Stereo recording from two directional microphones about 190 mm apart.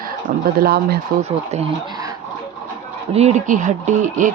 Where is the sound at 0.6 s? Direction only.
55° right (ahead or behind).